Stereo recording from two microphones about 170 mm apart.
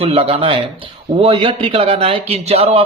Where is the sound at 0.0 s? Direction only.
35° right (ahead or behind).